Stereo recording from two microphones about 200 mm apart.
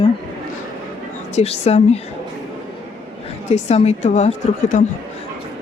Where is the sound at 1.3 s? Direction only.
30° left (ahead or behind).